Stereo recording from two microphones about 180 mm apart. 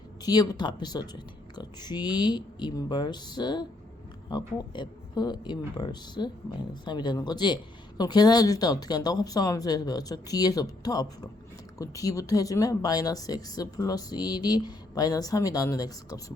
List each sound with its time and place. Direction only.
0.2 s a woman's voice: 20° left (ahead or behind)